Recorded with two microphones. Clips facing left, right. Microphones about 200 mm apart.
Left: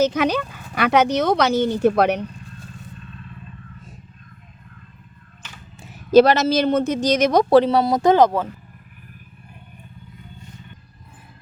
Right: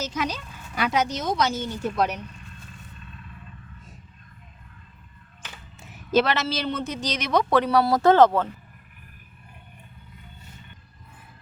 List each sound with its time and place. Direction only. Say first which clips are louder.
0.0 s speech: left 11 dB; 65° left (ahead or behind)
6.1 s speech: left 9 dB; 40° left (ahead or behind)
7.6 s speech: left 2 dB; 25° left (ahead or behind)